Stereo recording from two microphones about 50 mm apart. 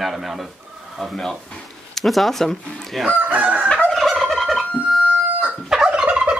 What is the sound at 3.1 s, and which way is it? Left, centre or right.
Chicken, right.